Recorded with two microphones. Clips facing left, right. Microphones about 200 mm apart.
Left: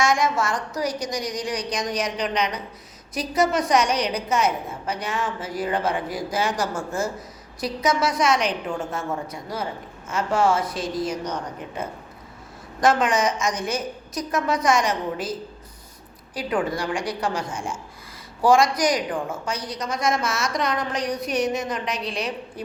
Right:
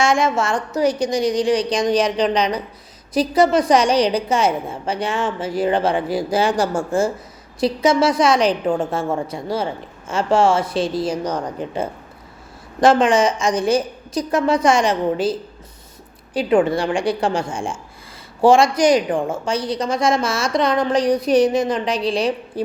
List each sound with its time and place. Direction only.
0.0 s a woman's voice: 30° right (ahead or behind)